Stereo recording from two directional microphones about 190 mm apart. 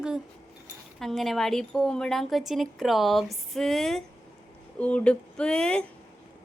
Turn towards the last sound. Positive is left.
turn(degrees=5)  # may be behind; listen again after turning